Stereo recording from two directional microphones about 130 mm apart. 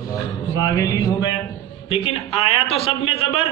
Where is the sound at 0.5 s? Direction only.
25° left (ahead or behind).